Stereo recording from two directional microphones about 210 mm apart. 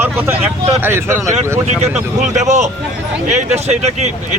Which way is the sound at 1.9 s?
35° right (ahead or behind).